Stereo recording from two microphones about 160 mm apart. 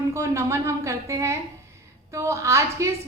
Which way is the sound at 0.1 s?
20° right (ahead or behind).